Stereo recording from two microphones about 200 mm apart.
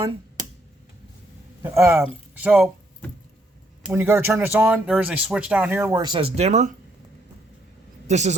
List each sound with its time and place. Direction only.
1.6 s speech: 15° right (ahead or behind)
3.8 s speech: 10° right (ahead or behind); by 6.7 s 35° right (ahead or behind)
8.0 s a woman's voice: 35° right (ahead or behind)